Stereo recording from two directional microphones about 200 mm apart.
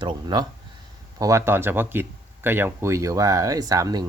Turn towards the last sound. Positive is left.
turn(degrees=-20)  # may be behind; listen again after turning